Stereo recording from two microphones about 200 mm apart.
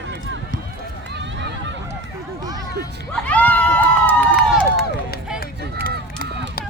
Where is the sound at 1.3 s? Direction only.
60° right (ahead or behind).